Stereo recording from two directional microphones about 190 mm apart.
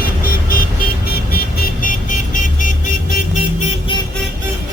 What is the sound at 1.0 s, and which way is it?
Vehicle, 50° left (ahead or behind).